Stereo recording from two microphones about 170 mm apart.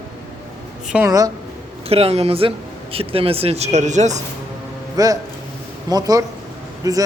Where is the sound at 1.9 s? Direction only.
35° right (ahead or behind).